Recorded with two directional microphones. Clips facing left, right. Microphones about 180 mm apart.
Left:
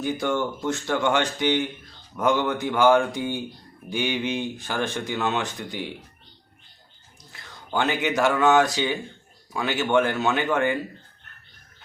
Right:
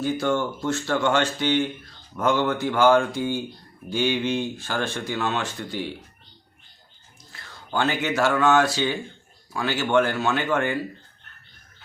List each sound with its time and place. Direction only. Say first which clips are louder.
0.0 s speech: right 1 dB; 15° left (ahead or behind)
7.3 s a sound: right 1 dB; 15° left (ahead or behind)
7.7 s speech: even; 15° left (ahead or behind)